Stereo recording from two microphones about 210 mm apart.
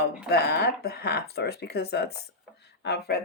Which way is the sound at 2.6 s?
55° left (ahead or behind).